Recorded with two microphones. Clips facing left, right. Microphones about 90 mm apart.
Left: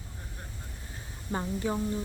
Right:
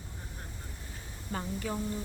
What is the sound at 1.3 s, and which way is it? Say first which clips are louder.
Speech: left 4 dB; 20° left (ahead or behind).